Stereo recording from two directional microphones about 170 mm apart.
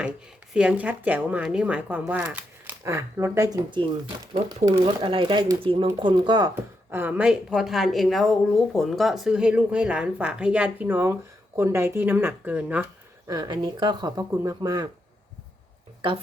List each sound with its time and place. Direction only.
0.5 s speech: 5° right (ahead or behind); by 6.5 s 25° right (ahead or behind)
6.9 s speech: 10° right (ahead or behind)
13.2 s speech: 25° right (ahead or behind)